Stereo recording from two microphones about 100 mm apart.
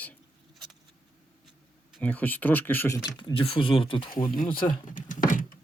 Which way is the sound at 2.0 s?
15° left (ahead or behind).